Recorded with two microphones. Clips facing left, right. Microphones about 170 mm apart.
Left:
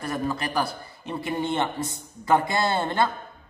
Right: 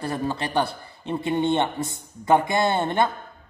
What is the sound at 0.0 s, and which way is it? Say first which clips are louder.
A man's voice: right 1 dB; 30° right (ahead or behind).